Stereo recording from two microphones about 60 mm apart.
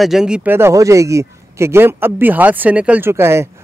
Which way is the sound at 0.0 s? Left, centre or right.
Centre.